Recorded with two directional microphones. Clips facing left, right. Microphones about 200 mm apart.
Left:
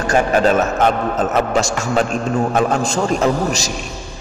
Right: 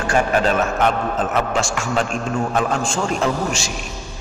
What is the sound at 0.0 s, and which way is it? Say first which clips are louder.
A man's voice: left 3 dB; 40° left (ahead or behind).